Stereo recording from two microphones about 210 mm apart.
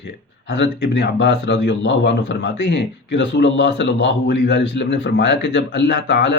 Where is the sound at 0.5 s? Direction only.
55° left (ahead or behind).